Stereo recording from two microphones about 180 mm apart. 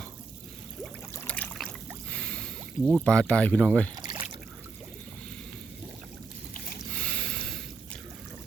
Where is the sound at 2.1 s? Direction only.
5° left (ahead or behind).